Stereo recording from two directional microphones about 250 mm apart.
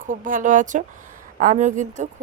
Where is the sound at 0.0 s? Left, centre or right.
Right.